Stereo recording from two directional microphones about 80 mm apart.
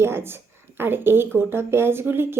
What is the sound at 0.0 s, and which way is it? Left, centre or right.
Speech, right.